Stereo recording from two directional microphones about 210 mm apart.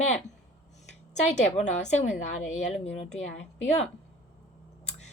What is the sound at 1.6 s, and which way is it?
A woman's voice, 35° left (ahead or behind).